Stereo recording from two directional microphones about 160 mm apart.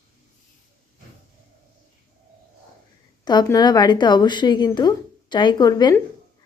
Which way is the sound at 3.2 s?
25° left (ahead or behind).